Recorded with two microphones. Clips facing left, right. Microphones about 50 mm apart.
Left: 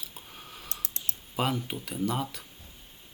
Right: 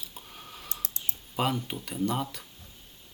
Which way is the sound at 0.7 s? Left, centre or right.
Left.